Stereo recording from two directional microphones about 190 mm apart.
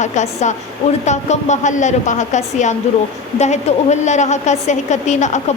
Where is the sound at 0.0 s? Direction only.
40° left (ahead or behind).